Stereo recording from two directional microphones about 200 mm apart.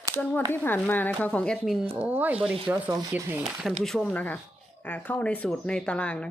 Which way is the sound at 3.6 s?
Centre (ahead or behind).